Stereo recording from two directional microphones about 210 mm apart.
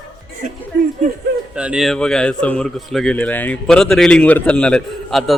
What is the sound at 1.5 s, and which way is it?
A man's voice, 5° right (ahead or behind).